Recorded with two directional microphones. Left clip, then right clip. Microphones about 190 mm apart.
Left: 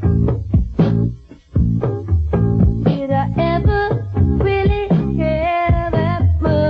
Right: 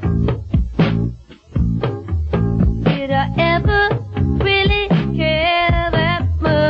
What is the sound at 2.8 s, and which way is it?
Music, 40° left (ahead or behind).